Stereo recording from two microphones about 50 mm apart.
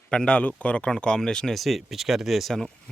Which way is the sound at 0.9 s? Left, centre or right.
Centre.